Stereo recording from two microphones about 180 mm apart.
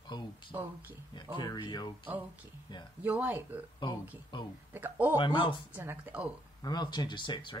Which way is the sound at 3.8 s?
25° left (ahead or behind).